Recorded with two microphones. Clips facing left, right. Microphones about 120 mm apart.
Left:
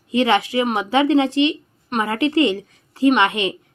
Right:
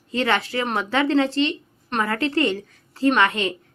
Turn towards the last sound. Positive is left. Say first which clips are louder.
# left 3 dB
turn(degrees=20)  # may be behind; listen again after turning